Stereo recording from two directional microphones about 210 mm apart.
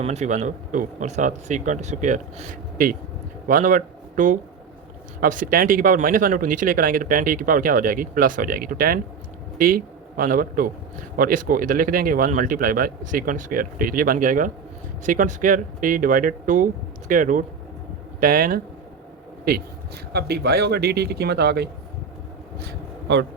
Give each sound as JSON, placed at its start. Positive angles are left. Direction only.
{"t": 0.0, "sound": "a man's voice", "side_deg": -30}
{"t": 20.1, "sound": "speech", "side_deg": -50}
{"t": 22.6, "sound": "a sound", "side_deg": -55}